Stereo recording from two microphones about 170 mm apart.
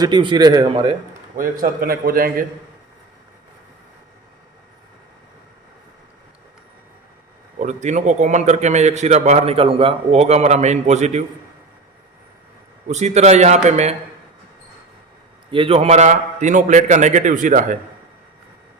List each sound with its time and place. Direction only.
0.0 s a man's voice: 25° right (ahead or behind)
1.4 s a man's voice: 55° right (ahead or behind)
7.6 s a man's voice: 45° right (ahead or behind)
12.9 s a man's voice: 40° right (ahead or behind)
15.5 s a man's voice: 30° right (ahead or behind); by 17.7 s 50° right (ahead or behind)